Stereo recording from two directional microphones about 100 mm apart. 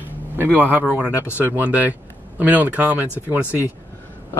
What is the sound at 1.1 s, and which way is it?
Speech, 25° left (ahead or behind).